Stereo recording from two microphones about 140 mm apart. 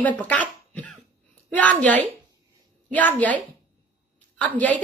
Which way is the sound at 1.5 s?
10° left (ahead or behind).